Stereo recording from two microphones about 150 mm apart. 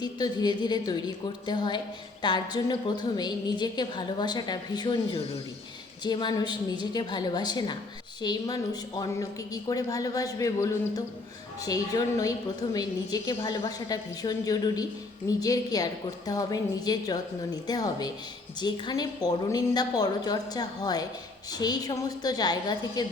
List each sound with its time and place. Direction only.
0.0 s a woman's voice: 25° left (ahead or behind)